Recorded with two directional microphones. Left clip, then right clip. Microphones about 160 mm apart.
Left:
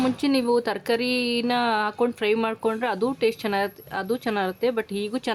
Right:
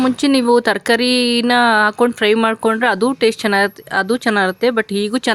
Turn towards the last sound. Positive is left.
turn(degrees=-20)  # may be behind; listen again after turning